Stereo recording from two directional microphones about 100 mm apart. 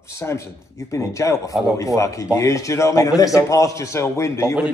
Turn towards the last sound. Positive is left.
turn(degrees=30)  # may be behind; listen again after turning